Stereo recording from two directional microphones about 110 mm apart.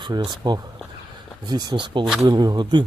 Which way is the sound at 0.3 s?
40° right (ahead or behind).